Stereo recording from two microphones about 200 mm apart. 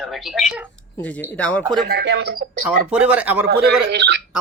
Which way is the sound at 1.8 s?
55° right (ahead or behind).